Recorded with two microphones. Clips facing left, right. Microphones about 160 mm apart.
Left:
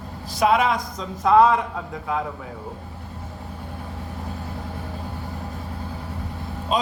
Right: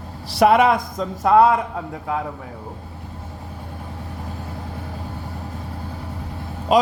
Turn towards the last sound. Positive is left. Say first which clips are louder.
# right 7 dB
turn(degrees=-90)